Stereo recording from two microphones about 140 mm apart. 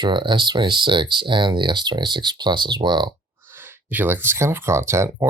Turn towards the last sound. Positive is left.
turn(degrees=-20)  # may be behind; listen again after turning